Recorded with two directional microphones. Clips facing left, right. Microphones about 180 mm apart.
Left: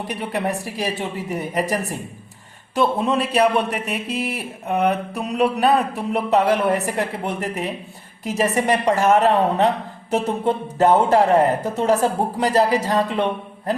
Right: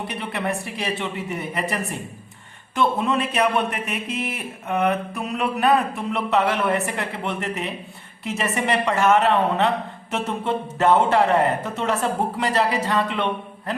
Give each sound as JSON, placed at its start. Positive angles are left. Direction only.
{"t": 0.1, "sound": "speech", "side_deg": 40}